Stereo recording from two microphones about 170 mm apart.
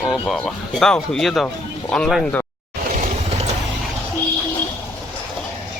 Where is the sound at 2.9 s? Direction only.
45° right (ahead or behind).